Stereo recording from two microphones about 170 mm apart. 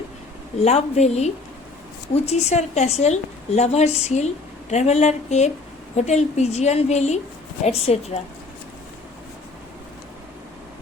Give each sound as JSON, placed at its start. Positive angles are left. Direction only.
{"t": 0.6, "sound": "a woman's voice", "side_deg": 40}